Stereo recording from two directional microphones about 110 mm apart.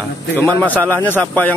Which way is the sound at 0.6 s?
15° left (ahead or behind).